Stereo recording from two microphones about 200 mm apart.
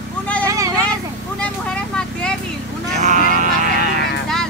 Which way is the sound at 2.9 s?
40° right (ahead or behind).